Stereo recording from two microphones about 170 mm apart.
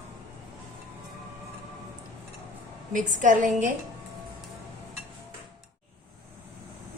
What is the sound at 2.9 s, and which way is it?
Speech, 50° right (ahead or behind).